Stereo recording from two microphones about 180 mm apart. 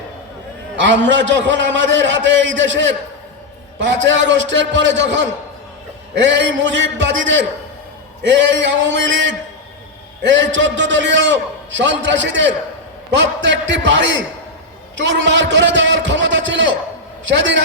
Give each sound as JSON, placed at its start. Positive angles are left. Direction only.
{"t": 0.8, "sound": "a man's voice", "side_deg": -85}